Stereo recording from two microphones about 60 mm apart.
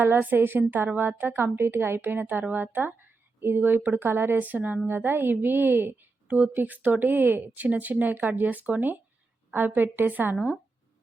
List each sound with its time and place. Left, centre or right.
0.0 s a woman's voice: right
10.3 s speech: centre